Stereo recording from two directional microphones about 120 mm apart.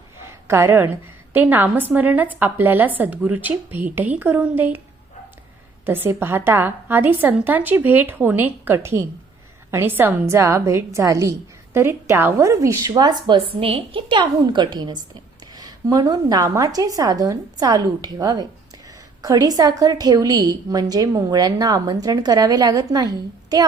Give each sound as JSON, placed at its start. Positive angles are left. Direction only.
{"t": 0.3, "sound": "a sound", "side_deg": -20}
{"t": 1.3, "sound": "a woman's voice", "side_deg": -15}
{"t": 5.8, "sound": "a woman's voice", "side_deg": -20}
{"t": 12.9, "sound": "a woman's voice", "side_deg": -35}
{"t": 13.6, "sound": "a woman's voice", "side_deg": -50}